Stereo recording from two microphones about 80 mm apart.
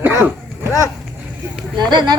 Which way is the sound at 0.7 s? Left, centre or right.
Left.